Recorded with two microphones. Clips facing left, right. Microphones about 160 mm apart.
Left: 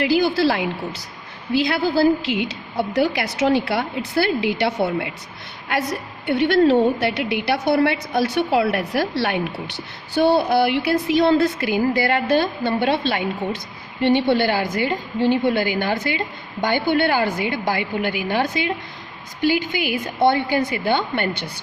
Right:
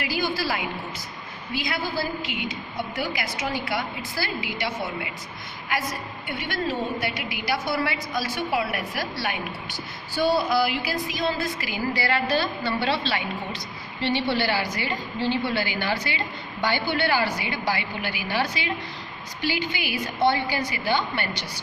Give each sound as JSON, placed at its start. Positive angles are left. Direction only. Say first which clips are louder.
{"t": 0.0, "sound": "a woman's voice", "louder": "left 10 dB", "side_deg": 70}
{"t": 2.9, "sound": "a woman's voice", "louder": "left 11 dB", "side_deg": 65}
{"t": 7.4, "sound": "a woman's voice", "louder": "left 7 dB", "side_deg": 60}